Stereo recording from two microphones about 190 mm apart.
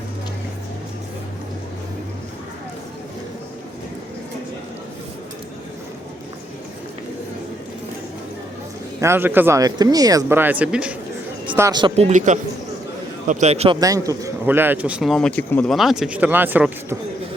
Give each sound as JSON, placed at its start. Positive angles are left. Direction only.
{"t": 9.0, "sound": "speech", "side_deg": -15}
{"t": 11.5, "sound": "speech", "side_deg": -20}
{"t": 12.0, "sound": "a man's voice", "side_deg": -40}
{"t": 13.7, "sound": "speech", "side_deg": -20}